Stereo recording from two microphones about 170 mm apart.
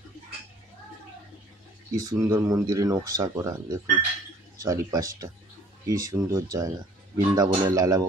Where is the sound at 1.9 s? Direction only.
20° right (ahead or behind).